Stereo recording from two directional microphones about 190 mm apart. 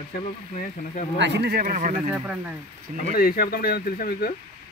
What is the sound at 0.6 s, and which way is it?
Speech, 45° left (ahead or behind).